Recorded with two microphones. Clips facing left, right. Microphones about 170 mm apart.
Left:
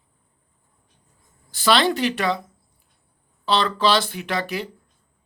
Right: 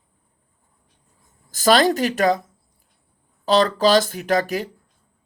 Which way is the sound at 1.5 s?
45° right (ahead or behind).